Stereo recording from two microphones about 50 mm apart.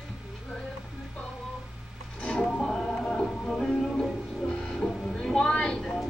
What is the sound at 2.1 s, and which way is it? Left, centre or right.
Music, left.